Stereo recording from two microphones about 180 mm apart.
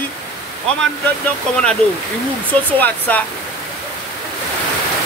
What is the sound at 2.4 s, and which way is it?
Speech, 10° left (ahead or behind).